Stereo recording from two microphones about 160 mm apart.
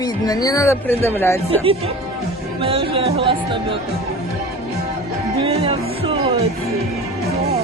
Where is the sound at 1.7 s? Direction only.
40° right (ahead or behind).